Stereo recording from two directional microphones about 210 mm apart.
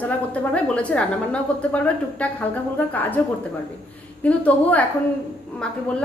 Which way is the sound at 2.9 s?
10° left (ahead or behind).